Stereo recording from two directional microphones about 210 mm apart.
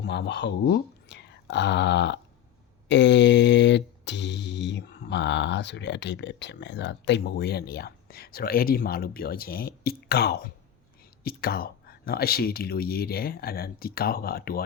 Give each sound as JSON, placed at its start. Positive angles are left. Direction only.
{"t": 0.0, "sound": "speech", "side_deg": 55}
{"t": 2.9, "sound": "a sound", "side_deg": 55}
{"t": 11.2, "sound": "speech", "side_deg": 45}